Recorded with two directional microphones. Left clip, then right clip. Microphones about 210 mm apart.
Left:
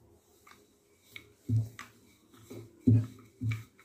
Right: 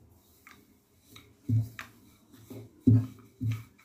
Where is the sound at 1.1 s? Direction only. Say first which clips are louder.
Left 5 dB; 10° left (ahead or behind).